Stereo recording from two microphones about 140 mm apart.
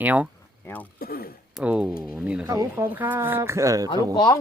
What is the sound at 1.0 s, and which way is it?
Speech, 90° left.